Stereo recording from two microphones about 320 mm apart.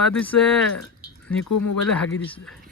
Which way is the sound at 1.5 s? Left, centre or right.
Left.